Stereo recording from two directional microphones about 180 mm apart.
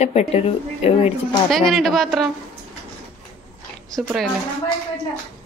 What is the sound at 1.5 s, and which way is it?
Speech, centre (ahead or behind).